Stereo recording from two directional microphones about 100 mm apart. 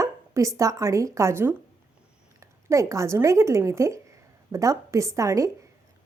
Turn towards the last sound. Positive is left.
turn(degrees=-35)  # may be behind; listen again after turning